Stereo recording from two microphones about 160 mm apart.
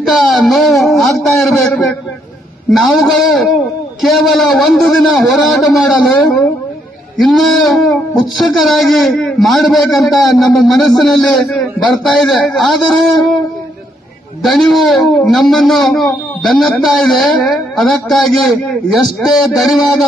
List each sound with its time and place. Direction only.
0.0 s speech: centre (ahead or behind)
14.4 s speech: centre (ahead or behind)
19.4 s speech: centre (ahead or behind)